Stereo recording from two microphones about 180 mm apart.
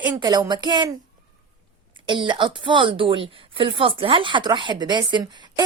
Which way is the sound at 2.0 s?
25° right (ahead or behind).